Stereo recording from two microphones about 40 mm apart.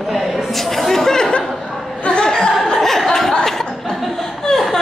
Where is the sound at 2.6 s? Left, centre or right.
Centre.